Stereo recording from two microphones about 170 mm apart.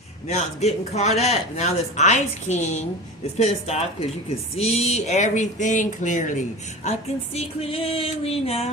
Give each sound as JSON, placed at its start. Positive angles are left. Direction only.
{"t": 0.3, "sound": "music", "side_deg": 40}
{"t": 1.2, "sound": "speech", "side_deg": 40}
{"t": 3.3, "sound": "music", "side_deg": 40}
{"t": 4.5, "sound": "speech", "side_deg": 40}
{"t": 7.3, "sound": "music", "side_deg": 35}